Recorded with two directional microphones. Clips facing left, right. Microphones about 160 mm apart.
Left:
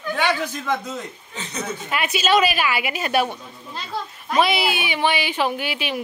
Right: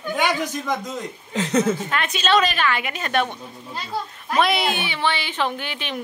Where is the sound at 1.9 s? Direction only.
10° left (ahead or behind).